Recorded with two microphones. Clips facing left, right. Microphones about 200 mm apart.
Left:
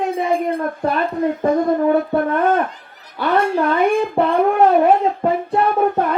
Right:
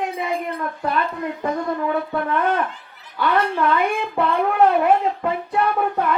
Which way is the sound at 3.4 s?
40° left (ahead or behind).